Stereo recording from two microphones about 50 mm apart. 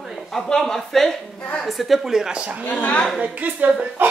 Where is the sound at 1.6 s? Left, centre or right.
Centre.